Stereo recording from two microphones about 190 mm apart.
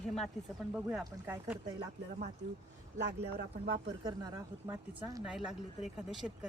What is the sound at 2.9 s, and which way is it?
Speech, 65° right (ahead or behind).